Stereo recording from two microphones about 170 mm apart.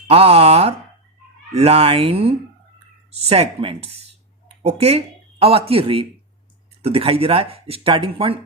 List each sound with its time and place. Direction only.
0.1 s speech: 35° right (ahead or behind)